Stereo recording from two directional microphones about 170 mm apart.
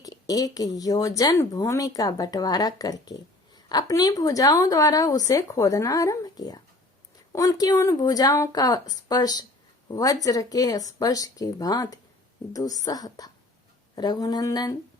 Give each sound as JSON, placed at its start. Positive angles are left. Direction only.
{"t": 0.0, "sound": "speech", "side_deg": 20}